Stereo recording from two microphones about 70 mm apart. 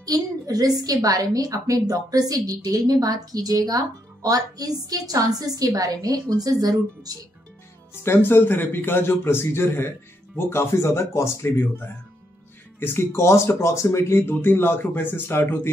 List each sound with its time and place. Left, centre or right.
0.0 s a woman's voice: right
7.9 s a man's voice: left